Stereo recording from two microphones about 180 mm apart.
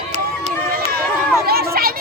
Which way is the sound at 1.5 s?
60° right (ahead or behind).